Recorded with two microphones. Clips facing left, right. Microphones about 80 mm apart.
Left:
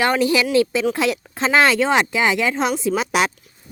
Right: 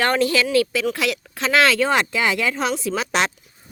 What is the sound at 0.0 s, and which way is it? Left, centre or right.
Speech, centre.